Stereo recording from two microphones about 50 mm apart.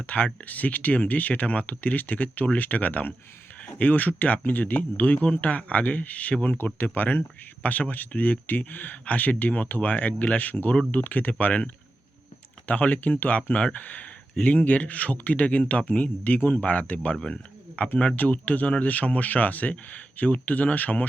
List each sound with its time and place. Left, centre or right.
0.0 s speech: left